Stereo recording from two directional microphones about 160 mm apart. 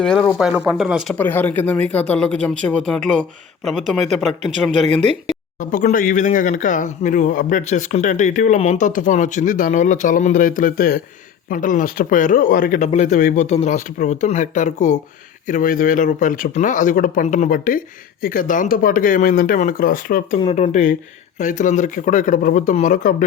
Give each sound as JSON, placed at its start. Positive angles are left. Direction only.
{"t": 0.0, "sound": "speech", "side_deg": 5}
{"t": 1.2, "sound": "speech", "side_deg": 10}
{"t": 4.7, "sound": "speech", "side_deg": -45}
{"t": 5.5, "sound": "speech", "side_deg": 55}
{"t": 11.4, "sound": "speech", "side_deg": 55}
{"t": 12.9, "sound": "speech", "side_deg": 50}
{"t": 20.4, "sound": "speech", "side_deg": 35}
{"t": 21.3, "sound": "speech", "side_deg": 50}